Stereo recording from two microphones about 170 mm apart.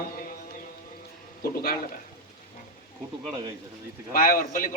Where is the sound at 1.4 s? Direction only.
60° left (ahead or behind).